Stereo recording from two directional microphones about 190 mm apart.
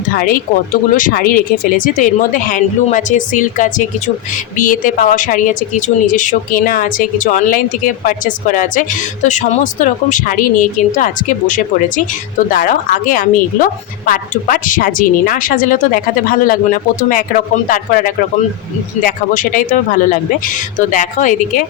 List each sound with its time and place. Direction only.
0.7 s a woman's voice: 45° left (ahead or behind)
19.0 s a woman's voice: 45° left (ahead or behind)